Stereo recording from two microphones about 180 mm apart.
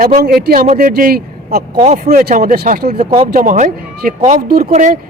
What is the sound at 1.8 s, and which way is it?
Speech, 40° right (ahead or behind).